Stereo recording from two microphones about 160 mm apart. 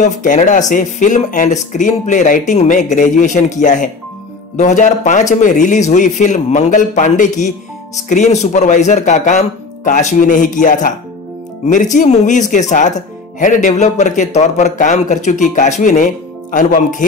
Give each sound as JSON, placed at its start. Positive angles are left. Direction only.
{"t": 0.0, "sound": "speech", "side_deg": 50}